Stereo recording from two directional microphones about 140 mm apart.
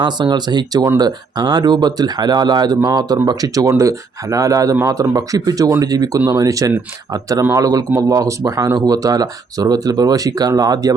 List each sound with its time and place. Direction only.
0.0 s speech: 30° right (ahead or behind)